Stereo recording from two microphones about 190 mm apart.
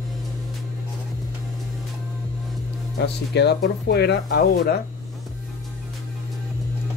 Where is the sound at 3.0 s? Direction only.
65° left (ahead or behind).